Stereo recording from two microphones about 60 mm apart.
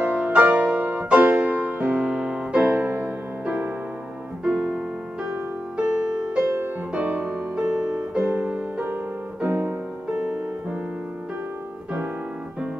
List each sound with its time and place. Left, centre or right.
0.0 s music: centre
4.5 s piano: right
5.8 s music: centre
9.5 s music: right
10.1 s music: centre